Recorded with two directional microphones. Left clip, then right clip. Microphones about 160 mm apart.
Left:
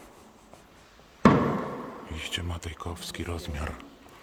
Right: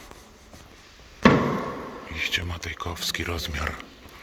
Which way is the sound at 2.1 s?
30° left (ahead or behind).